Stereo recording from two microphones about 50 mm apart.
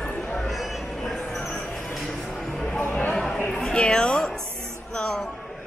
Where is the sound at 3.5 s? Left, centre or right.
Centre.